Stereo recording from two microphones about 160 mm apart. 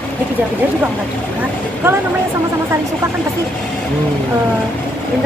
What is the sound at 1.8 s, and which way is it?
Speech, 15° right (ahead or behind).